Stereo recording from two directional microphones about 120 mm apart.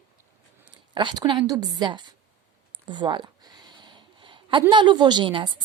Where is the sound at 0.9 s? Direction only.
40° right (ahead or behind).